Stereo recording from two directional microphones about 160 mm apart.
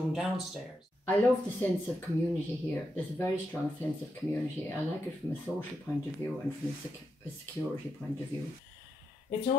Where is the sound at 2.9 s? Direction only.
15° left (ahead or behind).